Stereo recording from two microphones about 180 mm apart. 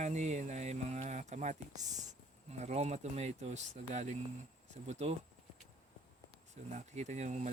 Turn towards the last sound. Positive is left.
turn(degrees=-40)  # may be behind; listen again after turning